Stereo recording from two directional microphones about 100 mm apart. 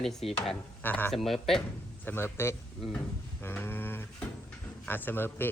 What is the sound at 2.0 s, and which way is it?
Speech, 20° left (ahead or behind).